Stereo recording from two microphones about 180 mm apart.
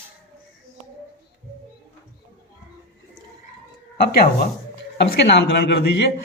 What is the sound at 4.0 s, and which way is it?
Speech, 55° left (ahead or behind).